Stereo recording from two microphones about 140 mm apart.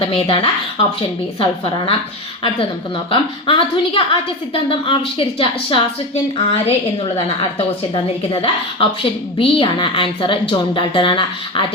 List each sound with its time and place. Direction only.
0.0 s a woman's voice: 40° left (ahead or behind)
3.1 s a woman's voice: 40° left (ahead or behind)